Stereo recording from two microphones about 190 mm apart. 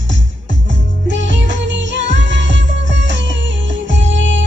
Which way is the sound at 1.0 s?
70° right (ahead or behind).